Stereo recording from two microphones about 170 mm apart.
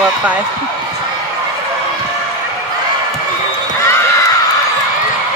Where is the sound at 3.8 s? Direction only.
15° left (ahead or behind).